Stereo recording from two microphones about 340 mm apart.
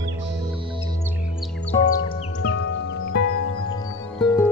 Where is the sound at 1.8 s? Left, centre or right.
Left.